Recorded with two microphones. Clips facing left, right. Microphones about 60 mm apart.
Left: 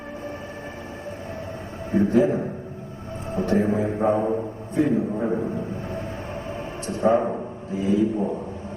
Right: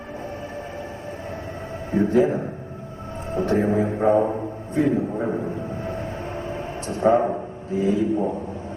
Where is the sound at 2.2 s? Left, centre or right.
Right.